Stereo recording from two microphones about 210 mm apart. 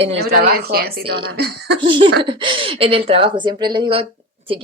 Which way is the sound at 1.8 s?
25° right (ahead or behind).